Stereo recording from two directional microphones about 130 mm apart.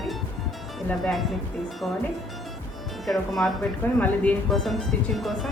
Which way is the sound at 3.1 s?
Centre (ahead or behind).